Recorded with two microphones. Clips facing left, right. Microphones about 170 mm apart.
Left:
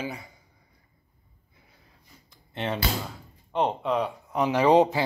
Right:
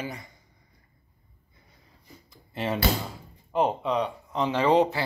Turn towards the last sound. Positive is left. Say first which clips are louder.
# left 2 dB
turn(degrees=15)  # may be behind; listen again after turning